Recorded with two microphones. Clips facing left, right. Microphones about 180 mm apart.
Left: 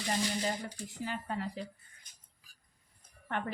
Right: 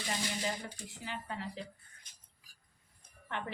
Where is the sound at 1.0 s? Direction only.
45° left (ahead or behind).